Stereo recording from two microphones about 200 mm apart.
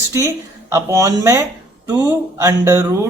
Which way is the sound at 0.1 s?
15° right (ahead or behind).